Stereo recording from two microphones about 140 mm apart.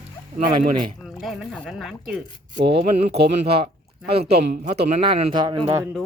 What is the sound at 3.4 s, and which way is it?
A man's voice, 45° right (ahead or behind).